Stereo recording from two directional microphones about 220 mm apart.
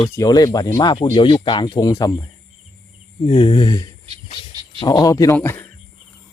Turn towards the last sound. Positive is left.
turn(degrees=10)  # may be behind; listen again after turning